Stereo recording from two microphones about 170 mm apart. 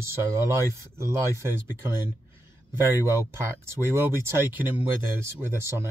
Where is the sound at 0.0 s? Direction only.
15° right (ahead or behind).